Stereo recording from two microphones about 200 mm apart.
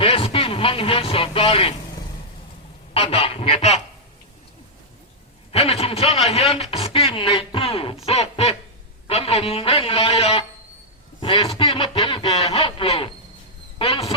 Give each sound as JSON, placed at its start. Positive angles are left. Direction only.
{"t": 0.0, "sound": "speech", "side_deg": 25}
{"t": 2.9, "sound": "speech", "side_deg": 30}
{"t": 5.5, "sound": "speech", "side_deg": 30}